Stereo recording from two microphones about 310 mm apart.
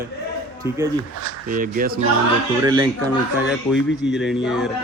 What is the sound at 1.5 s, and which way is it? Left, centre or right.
Speech, right.